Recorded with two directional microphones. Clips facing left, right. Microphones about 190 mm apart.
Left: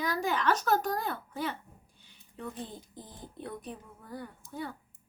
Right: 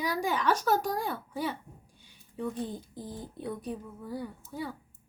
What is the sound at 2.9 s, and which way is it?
A woman's voice, 10° right (ahead or behind).